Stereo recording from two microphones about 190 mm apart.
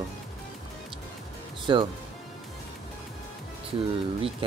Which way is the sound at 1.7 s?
25° right (ahead or behind).